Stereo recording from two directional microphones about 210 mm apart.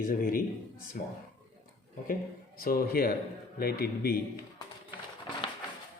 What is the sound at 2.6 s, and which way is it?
Speech, 45° left (ahead or behind).